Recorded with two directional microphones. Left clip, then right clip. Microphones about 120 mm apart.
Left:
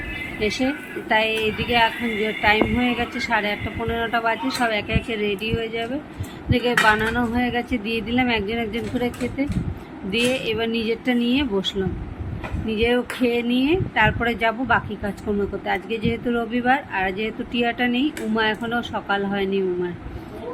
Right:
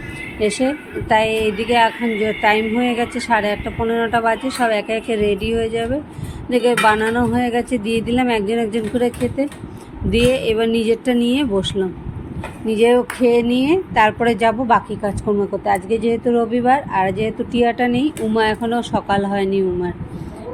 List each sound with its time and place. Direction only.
0.3 s a woman's voice: 45° right (ahead or behind)